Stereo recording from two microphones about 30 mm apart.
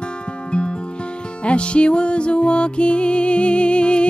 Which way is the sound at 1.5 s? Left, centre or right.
Left.